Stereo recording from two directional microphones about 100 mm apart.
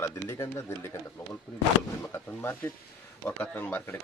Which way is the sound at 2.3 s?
20° left (ahead or behind).